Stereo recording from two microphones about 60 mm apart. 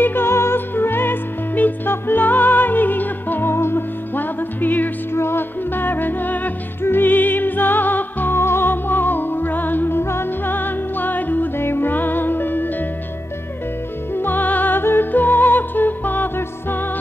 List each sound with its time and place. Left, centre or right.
0.0 s music: left
5.1 s music: left
8.4 s music: left
14.1 s music: left